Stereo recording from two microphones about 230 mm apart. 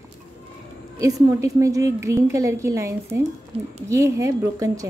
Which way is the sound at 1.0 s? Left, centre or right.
Centre.